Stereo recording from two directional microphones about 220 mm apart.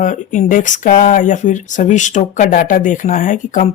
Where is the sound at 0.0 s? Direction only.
35° left (ahead or behind).